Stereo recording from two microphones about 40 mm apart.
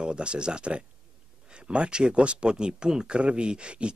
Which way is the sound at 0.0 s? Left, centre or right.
Right.